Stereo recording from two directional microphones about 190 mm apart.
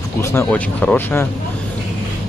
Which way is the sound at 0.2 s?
15° left (ahead or behind).